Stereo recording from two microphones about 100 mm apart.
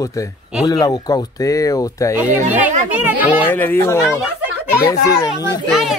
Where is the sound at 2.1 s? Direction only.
15° right (ahead or behind).